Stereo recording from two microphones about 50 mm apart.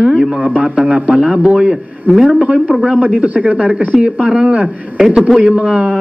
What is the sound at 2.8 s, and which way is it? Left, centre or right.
Speech, right.